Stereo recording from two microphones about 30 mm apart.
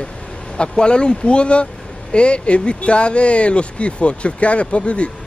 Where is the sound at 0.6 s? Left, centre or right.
Left.